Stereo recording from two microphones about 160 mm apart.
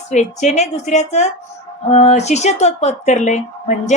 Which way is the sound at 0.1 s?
45° left (ahead or behind).